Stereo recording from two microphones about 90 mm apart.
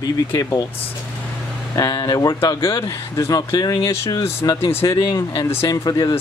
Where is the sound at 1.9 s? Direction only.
50° left (ahead or behind); by 5.7 s 25° left (ahead or behind).